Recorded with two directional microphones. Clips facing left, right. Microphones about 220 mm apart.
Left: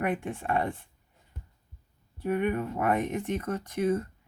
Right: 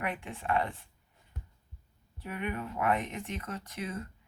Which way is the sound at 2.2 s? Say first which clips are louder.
Left 9 dB; 45° left (ahead or behind).